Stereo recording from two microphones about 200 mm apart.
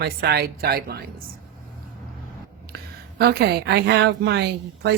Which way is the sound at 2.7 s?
55° right (ahead or behind).